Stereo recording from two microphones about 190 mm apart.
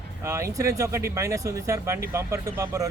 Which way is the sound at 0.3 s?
15° right (ahead or behind).